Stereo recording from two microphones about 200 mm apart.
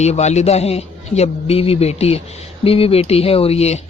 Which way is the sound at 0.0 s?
35° left (ahead or behind).